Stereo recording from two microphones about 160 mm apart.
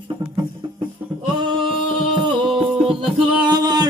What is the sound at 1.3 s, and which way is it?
Singing, 30° right (ahead or behind).